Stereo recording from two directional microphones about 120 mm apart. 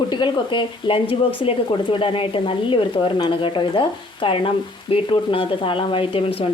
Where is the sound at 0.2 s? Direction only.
45° left (ahead or behind).